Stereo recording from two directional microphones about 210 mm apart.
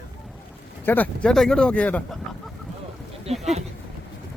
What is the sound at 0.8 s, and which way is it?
Speech, 10° left (ahead or behind).